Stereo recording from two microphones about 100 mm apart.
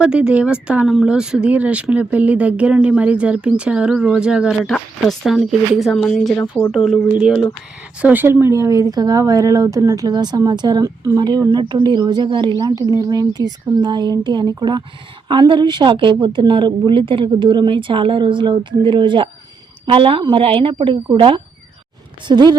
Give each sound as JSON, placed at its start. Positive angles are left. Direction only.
{"t": 0.0, "sound": "speech", "side_deg": -10}
{"t": 7.1, "sound": "speech", "side_deg": -5}
{"t": 8.0, "sound": "a woman's voice", "side_deg": -20}
{"t": 11.2, "sound": "a woman's voice", "side_deg": -45}